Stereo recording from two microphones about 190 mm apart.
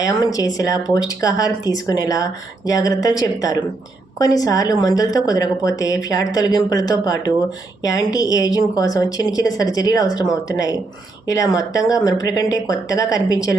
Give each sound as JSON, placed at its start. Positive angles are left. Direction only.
{"t": 0.0, "sound": "speech", "side_deg": 20}